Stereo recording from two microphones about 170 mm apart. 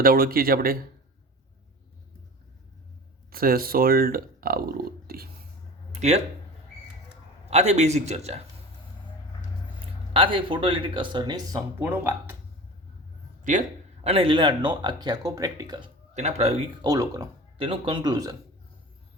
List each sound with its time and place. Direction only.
0.0 s speech: 60° right (ahead or behind)
3.2 s speech: 60° right (ahead or behind)
5.9 s speech: 40° right (ahead or behind)
7.5 s a man's voice: 40° right (ahead or behind)
9.8 s speech: 30° right (ahead or behind)
11.8 s speech: 10° right (ahead or behind)
13.4 s speech: 45° right (ahead or behind); by 15.9 s 25° right (ahead or behind)
16.1 s a man's voice: 40° right (ahead or behind)
16.8 s speech: 20° right (ahead or behind)
17.6 s speech: 30° right (ahead or behind)